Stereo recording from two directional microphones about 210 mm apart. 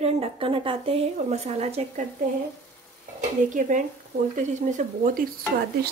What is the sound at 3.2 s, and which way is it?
A woman's voice, 35° right (ahead or behind).